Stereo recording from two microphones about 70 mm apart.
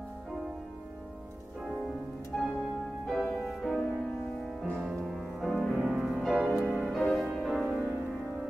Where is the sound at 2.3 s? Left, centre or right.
Centre.